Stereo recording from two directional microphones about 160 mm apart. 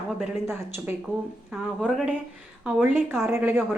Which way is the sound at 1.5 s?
Centre (ahead or behind).